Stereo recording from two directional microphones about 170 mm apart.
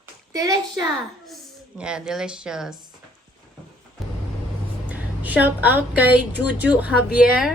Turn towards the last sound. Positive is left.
turn(degrees=-5)  # may be behind; listen again after turning